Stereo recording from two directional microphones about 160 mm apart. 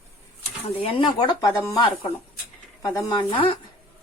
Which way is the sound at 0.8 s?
35° left (ahead or behind).